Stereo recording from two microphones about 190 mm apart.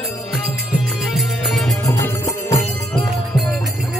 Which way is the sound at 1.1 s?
Centre (ahead or behind).